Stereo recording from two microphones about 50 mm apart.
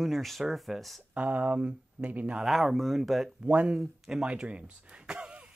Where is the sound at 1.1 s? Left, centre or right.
Right.